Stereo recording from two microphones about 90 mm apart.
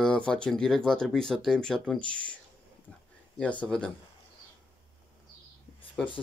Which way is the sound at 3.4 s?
15° left (ahead or behind).